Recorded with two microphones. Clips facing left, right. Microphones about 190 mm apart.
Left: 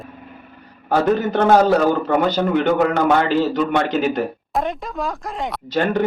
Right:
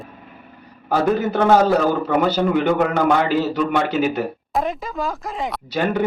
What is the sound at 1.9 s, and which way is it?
Speech, 5° right (ahead or behind).